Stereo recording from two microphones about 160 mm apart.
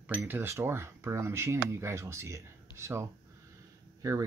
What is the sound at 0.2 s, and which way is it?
Speech, 15° right (ahead or behind).